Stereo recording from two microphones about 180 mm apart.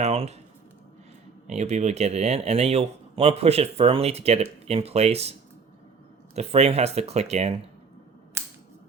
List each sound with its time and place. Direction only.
0.0 s speech: 35° right (ahead or behind)
1.5 s speech: 40° right (ahead or behind)
6.3 s speech: 35° right (ahead or behind)